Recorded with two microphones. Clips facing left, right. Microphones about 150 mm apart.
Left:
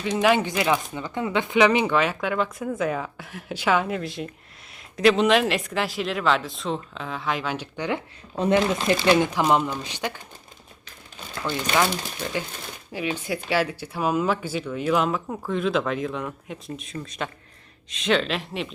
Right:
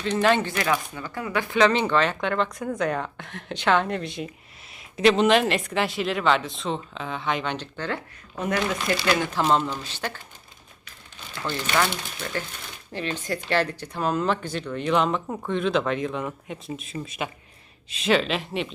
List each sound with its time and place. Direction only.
0.0 s speech: 10° left (ahead or behind)
8.4 s speech: 25° left (ahead or behind)
12.9 s speech: 10° left (ahead or behind)